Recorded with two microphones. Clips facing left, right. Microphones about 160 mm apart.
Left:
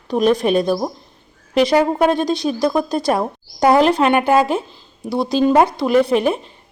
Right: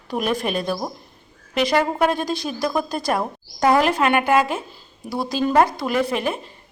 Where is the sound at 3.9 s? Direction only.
30° left (ahead or behind).